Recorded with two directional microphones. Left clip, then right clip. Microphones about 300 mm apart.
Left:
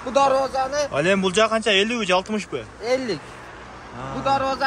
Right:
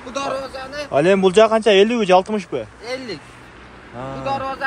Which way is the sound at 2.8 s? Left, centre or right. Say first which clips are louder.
Left 5 dB; left.